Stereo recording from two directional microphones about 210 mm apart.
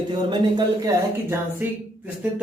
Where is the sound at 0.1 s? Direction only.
20° right (ahead or behind).